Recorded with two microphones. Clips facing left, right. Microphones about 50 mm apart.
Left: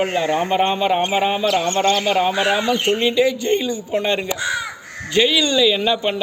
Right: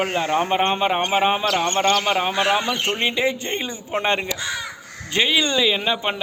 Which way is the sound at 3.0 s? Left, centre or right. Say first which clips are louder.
Left 4 dB; right.